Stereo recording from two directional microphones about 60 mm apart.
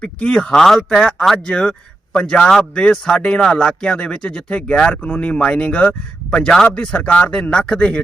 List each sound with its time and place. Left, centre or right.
0.0 s speech: centre
1.0 s speech: centre
1.5 s speech: centre